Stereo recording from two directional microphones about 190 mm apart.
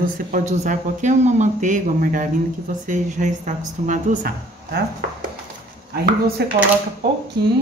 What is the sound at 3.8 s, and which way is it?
Speech, 50° right (ahead or behind).